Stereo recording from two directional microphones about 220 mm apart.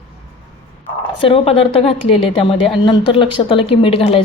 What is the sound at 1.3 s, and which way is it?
Speech, 25° left (ahead or behind).